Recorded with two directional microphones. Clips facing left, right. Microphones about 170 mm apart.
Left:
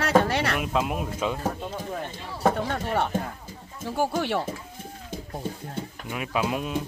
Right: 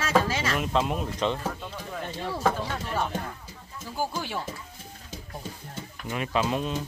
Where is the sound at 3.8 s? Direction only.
70° left (ahead or behind).